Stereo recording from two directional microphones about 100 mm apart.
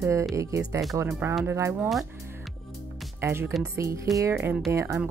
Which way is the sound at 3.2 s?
25° right (ahead or behind).